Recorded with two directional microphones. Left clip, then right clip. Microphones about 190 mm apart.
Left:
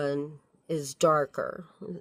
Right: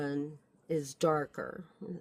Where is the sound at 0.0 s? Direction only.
50° left (ahead or behind).